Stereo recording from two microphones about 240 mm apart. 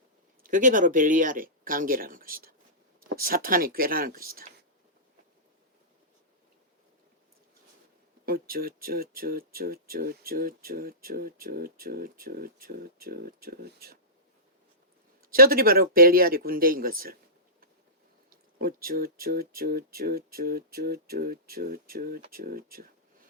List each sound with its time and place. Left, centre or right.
0.4 s speech: right
8.2 s speech: right
15.2 s speech: right
18.3 s speech: right